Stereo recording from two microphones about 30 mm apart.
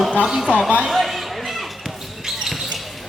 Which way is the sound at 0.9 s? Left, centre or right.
Centre.